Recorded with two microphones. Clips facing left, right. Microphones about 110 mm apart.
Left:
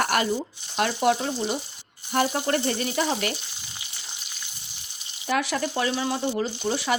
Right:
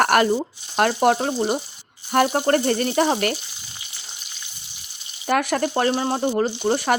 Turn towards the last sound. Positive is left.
turn(degrees=-50)  # may be behind; listen again after turning